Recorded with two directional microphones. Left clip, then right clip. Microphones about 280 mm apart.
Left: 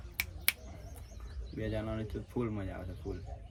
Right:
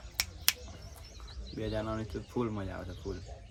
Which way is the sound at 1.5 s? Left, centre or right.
Centre.